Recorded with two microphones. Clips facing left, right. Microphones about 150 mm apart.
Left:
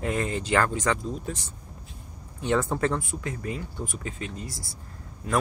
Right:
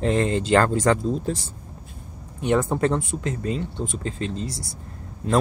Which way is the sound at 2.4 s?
15° right (ahead or behind).